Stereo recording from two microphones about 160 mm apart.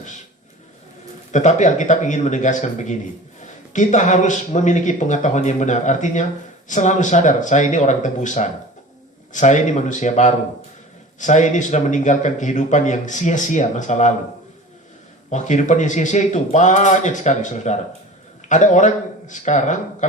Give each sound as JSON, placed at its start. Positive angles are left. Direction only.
{"t": 1.3, "sound": "a man's voice", "side_deg": 50}
{"t": 15.3, "sound": "a man's voice", "side_deg": 50}